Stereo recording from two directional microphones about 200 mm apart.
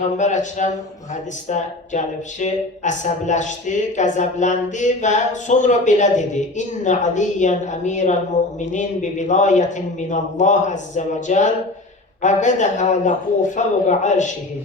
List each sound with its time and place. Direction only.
0.2 s speech: 35° left (ahead or behind)